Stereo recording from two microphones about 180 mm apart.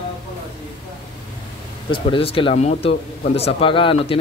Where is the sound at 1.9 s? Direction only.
30° left (ahead or behind).